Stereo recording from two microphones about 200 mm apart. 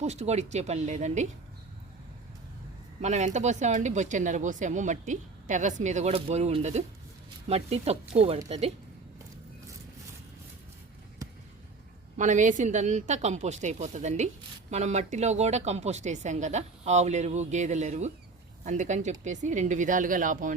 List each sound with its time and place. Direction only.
0.0 s speech: 35° right (ahead or behind)
3.0 s speech: 35° right (ahead or behind)
12.1 s speech: 40° right (ahead or behind)